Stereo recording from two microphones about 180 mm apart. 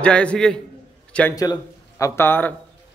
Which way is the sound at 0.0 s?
5° left (ahead or behind).